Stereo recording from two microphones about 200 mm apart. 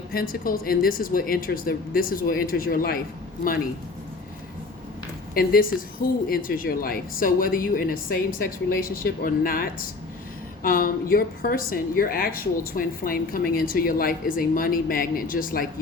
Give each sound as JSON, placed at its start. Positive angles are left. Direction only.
{"t": 0.1, "sound": "a woman's voice", "side_deg": 45}
{"t": 5.3, "sound": "a woman's voice", "side_deg": 45}